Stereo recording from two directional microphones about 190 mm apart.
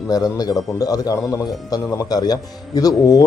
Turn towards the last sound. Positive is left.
turn(degrees=20)  # may be behind; listen again after turning